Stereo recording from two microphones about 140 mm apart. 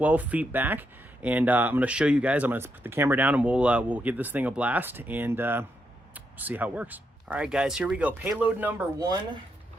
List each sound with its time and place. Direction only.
0.0 s speech: 10° right (ahead or behind)
9.0 s speech: 25° right (ahead or behind)